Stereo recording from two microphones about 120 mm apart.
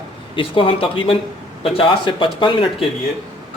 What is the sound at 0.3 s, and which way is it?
Speech, 45° left (ahead or behind).